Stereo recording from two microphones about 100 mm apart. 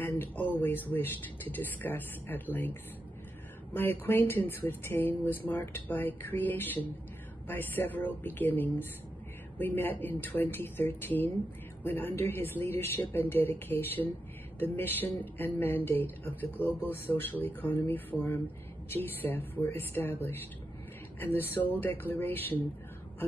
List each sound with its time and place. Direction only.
0.0 s speech: 20° left (ahead or behind)